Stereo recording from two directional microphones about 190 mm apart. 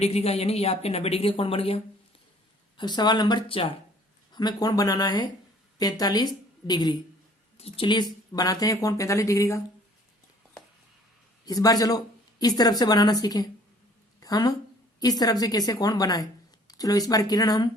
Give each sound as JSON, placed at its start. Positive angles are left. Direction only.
{"t": 0.0, "sound": "a woman's voice", "side_deg": 35}
{"t": 11.4, "sound": "speech", "side_deg": 20}
{"t": 14.2, "sound": "a sound", "side_deg": 20}
{"t": 15.0, "sound": "speech", "side_deg": 20}